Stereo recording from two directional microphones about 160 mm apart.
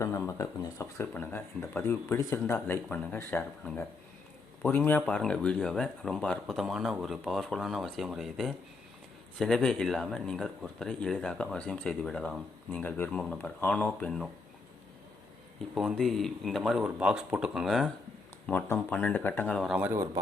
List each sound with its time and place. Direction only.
0.0 s speech: 15° left (ahead or behind)
15.7 s speech: centre (ahead or behind)
18.4 s speech: 10° left (ahead or behind)
19.6 s speech: 10° right (ahead or behind)